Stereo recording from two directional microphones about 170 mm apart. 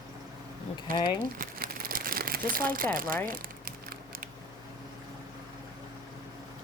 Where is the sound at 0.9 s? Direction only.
55° right (ahead or behind).